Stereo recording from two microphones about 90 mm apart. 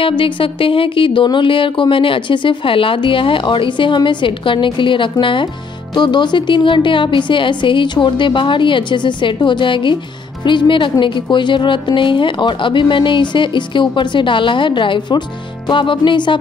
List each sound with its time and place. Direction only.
0.2 s a woman's voice: 75° left (ahead or behind); by 16.3 s 60° left (ahead or behind)